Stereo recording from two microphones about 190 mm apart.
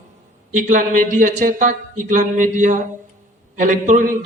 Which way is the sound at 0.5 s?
45° right (ahead or behind).